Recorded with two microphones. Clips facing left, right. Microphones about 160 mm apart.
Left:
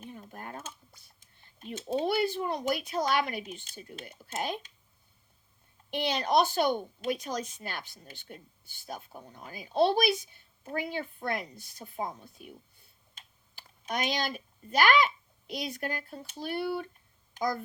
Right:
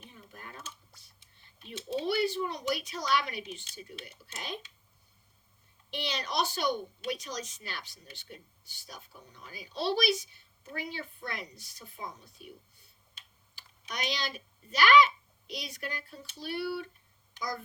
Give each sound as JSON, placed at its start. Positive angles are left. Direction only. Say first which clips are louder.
{"t": 0.0, "sound": "speech", "louder": "left 7 dB", "side_deg": 50}
{"t": 5.9, "sound": "a woman's voice", "louder": "left 9 dB", "side_deg": 50}